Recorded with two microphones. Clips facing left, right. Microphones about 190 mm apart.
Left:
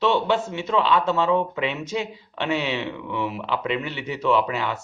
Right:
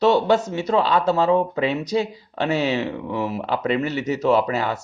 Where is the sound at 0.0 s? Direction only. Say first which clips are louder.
Right 4 dB; 40° right (ahead or behind).